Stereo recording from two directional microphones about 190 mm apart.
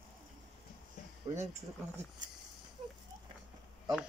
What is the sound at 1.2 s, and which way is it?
Speech, 35° right (ahead or behind).